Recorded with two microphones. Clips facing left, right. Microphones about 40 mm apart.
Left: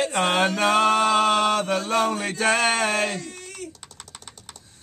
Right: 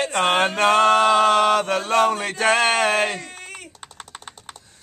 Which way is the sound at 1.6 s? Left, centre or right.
Centre.